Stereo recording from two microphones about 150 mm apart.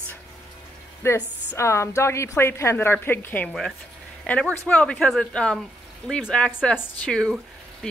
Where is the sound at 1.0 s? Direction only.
15° left (ahead or behind).